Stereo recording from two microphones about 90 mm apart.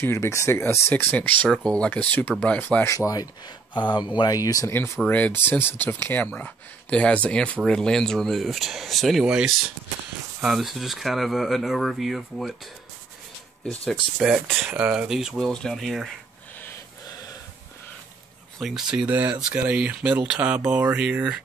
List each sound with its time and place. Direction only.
0.0 s speech: 30° left (ahead or behind); by 2.8 s 15° left (ahead or behind)
2.8 s speech: 35° left (ahead or behind)
4.6 s speech: 30° left (ahead or behind)
5.0 s speech: 15° left (ahead or behind); by 12.5 s centre (ahead or behind)
14.1 s speech: 5° right (ahead or behind)
15.3 s speech: 5° left (ahead or behind)
18.6 s speech: 5° right (ahead or behind)